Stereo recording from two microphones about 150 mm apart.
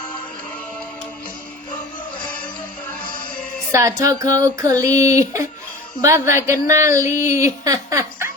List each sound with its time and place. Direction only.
3.7 s a woman's voice: 20° right (ahead or behind)